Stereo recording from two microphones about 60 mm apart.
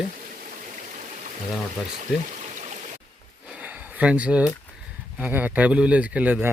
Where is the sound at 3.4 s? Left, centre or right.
Right.